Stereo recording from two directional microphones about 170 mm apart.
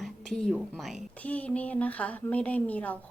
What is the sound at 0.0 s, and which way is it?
A woman's voice, 5° left (ahead or behind).